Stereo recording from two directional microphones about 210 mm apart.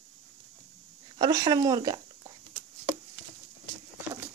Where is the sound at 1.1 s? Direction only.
20° right (ahead or behind).